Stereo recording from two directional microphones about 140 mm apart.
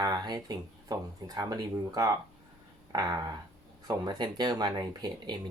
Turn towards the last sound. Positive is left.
turn(degrees=-30)  # may be behind; listen again after turning